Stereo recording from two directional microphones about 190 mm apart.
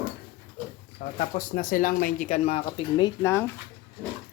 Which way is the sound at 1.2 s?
45° left (ahead or behind).